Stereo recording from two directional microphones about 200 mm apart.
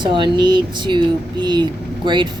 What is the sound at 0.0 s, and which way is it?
Speech, 25° right (ahead or behind).